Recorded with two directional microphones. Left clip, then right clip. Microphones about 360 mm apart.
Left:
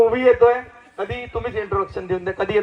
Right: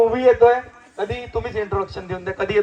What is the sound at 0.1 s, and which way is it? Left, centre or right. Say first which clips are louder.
Speech: right 1 dB; left.